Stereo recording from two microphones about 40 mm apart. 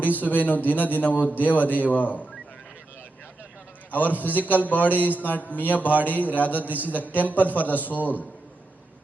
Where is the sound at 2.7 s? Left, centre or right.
Left.